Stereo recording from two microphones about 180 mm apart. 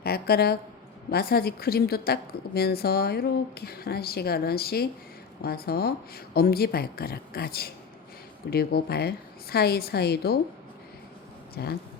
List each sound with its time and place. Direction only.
0.0 s speech: 60° left (ahead or behind)
11.5 s speech: 60° left (ahead or behind)